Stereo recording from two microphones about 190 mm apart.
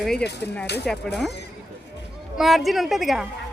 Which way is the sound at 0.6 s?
60° left (ahead or behind).